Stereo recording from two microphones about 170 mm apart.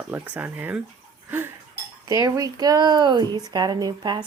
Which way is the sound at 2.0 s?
20° right (ahead or behind).